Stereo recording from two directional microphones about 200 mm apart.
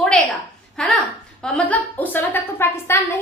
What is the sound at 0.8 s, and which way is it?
A woman's voice, 5° left (ahead or behind).